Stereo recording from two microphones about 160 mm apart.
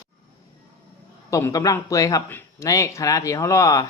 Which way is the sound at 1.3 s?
20° left (ahead or behind).